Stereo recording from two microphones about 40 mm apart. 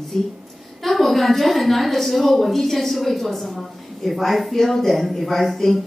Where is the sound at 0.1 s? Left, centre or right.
Centre.